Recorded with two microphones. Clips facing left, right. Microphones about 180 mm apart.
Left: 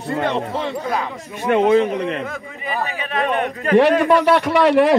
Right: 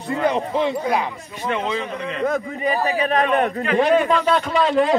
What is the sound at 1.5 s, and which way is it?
Speech, 55° left (ahead or behind).